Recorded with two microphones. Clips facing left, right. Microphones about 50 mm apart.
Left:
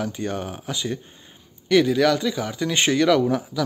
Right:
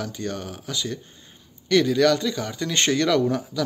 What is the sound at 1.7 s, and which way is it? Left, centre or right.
Speech, centre.